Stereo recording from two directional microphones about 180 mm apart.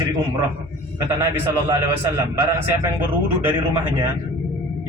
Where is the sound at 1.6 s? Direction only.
15° right (ahead or behind).